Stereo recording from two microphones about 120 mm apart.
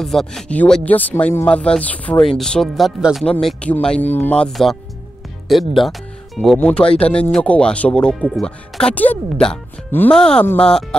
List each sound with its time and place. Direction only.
0.0 s speech: 5° left (ahead or behind)
4.5 s speech: centre (ahead or behind)
10.4 s speech: 15° left (ahead or behind)
10.7 s speech: 5° left (ahead or behind)